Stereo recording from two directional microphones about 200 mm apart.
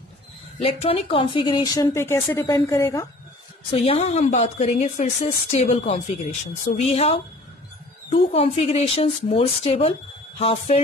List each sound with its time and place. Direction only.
0.6 s speech: 30° left (ahead or behind)
3.7 s a woman's voice: 30° left (ahead or behind)